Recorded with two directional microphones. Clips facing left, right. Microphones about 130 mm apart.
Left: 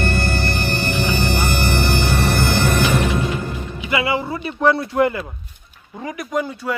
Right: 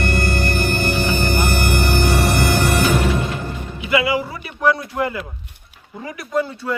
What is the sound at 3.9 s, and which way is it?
Speech, 25° left (ahead or behind).